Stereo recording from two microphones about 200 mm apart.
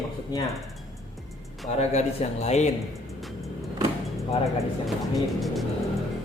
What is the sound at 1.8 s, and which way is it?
Speech, 35° left (ahead or behind).